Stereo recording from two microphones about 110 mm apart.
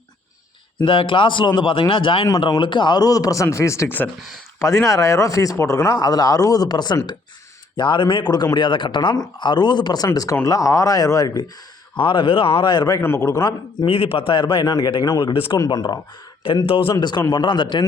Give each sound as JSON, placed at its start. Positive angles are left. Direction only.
{"t": 0.9, "sound": "speech", "side_deg": 50}
{"t": 4.6, "sound": "speech", "side_deg": 30}
{"t": 11.9, "sound": "speech", "side_deg": 50}
{"t": 13.0, "sound": "a man's voice", "side_deg": 25}
{"t": 13.8, "sound": "speech", "side_deg": 55}
{"t": 15.4, "sound": "speech", "side_deg": 50}
{"t": 15.6, "sound": "speech", "side_deg": 40}
{"t": 16.6, "sound": "a man's voice", "side_deg": 55}
{"t": 16.9, "sound": "speech", "side_deg": 40}